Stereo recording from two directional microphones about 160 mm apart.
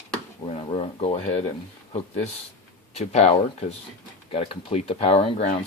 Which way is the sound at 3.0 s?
40° left (ahead or behind).